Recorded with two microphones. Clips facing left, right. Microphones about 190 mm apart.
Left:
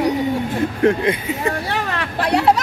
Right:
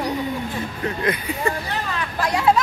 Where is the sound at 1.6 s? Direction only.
75° left (ahead or behind).